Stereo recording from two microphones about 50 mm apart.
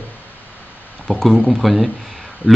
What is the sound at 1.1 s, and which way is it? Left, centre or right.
Speech, centre.